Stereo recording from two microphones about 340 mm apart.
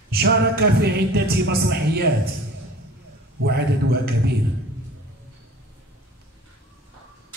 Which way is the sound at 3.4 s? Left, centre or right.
Right.